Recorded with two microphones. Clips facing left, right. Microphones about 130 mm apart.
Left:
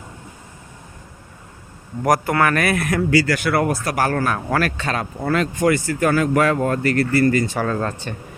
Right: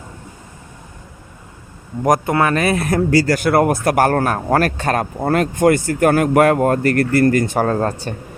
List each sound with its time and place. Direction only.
2.0 s speech: 20° right (ahead or behind)
3.1 s speech: 40° right (ahead or behind)